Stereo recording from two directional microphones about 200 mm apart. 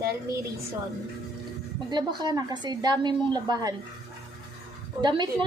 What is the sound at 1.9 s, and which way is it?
A woman's voice, 20° right (ahead or behind).